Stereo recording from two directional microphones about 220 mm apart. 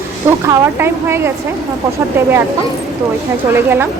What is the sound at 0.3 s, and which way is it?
A woman's voice, 10° right (ahead or behind).